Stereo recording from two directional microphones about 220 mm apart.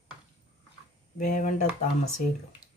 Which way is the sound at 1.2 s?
35° left (ahead or behind).